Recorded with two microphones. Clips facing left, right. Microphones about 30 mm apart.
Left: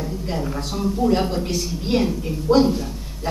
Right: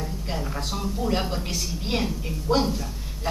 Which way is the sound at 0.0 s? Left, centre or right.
Centre.